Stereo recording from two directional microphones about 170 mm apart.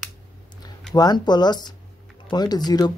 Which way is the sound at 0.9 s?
25° left (ahead or behind).